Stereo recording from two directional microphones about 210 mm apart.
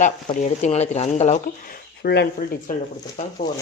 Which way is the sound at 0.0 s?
35° left (ahead or behind).